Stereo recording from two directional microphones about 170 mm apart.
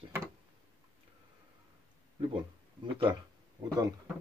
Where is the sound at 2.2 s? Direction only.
30° right (ahead or behind).